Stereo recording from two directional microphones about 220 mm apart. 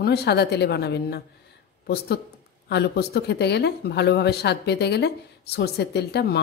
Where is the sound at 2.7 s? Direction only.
50° left (ahead or behind).